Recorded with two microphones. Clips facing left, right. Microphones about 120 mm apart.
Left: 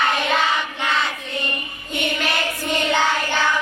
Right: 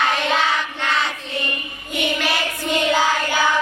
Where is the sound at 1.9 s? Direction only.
5° right (ahead or behind).